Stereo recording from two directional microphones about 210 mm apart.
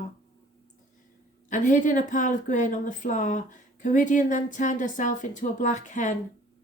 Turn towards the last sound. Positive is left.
turn(degrees=35)  # may be behind; listen again after turning